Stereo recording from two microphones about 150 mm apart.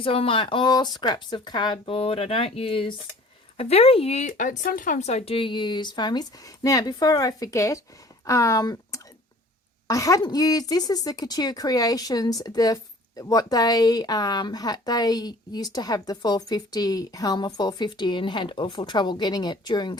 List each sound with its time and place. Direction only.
0.0 s a woman's voice: 35° left (ahead or behind)